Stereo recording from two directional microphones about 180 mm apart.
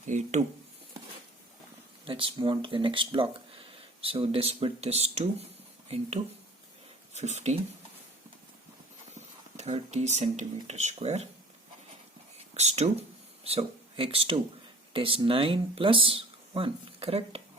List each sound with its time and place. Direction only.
0.1 s speech: 40° right (ahead or behind)
2.0 s speech: 30° right (ahead or behind)
9.1 s speech: 40° right (ahead or behind)
12.5 s speech: 35° right (ahead or behind)